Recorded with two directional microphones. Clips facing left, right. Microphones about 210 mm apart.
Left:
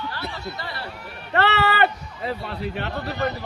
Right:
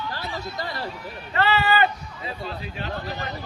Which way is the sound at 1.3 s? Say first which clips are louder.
Left 1 dB; 70° left (ahead or behind).